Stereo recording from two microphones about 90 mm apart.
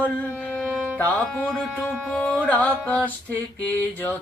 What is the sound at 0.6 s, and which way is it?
Music, 5° right (ahead or behind).